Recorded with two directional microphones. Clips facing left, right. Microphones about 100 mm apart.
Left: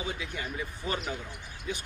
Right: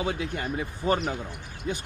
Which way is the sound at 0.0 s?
50° right (ahead or behind).